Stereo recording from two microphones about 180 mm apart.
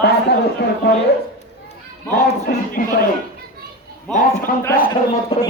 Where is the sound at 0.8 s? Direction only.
60° left (ahead or behind).